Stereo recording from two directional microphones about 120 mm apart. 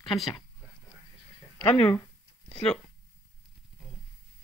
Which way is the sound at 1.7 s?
35° left (ahead or behind).